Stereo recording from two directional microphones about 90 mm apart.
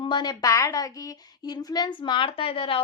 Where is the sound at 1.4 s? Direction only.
50° left (ahead or behind); by 2.8 s 80° left.